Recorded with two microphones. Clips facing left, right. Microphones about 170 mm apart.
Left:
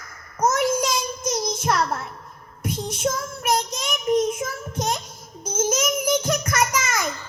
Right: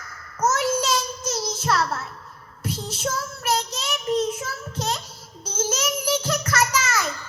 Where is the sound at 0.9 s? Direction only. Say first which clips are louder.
Left 1 dB; 10° left (ahead or behind).